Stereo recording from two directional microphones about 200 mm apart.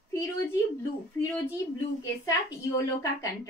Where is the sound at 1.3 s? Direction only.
15° left (ahead or behind).